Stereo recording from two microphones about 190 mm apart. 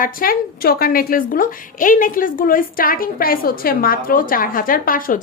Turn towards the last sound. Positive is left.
turn(degrees=45)  # may be behind; listen again after turning